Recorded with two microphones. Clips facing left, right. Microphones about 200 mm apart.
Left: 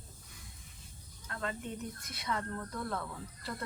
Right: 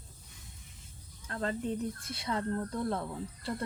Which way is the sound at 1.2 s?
35° right (ahead or behind).